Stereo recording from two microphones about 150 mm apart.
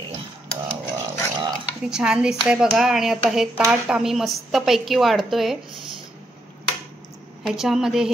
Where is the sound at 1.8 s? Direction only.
5° right (ahead or behind).